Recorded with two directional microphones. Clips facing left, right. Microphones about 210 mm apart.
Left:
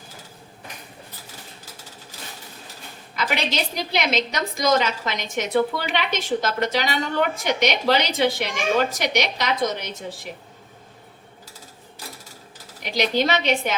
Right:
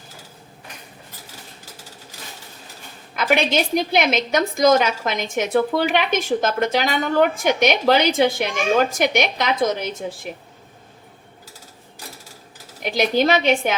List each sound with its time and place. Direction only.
3.2 s a woman's voice: 55° right (ahead or behind)
12.8 s a woman's voice: 50° right (ahead or behind)